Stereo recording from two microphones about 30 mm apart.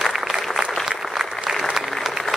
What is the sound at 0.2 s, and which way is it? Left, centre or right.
Applause, centre.